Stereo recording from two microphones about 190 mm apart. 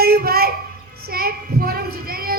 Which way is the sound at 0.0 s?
50° right (ahead or behind).